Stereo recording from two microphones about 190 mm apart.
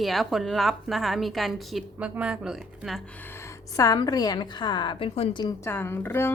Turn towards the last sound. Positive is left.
turn(degrees=10)  # may be behind; listen again after turning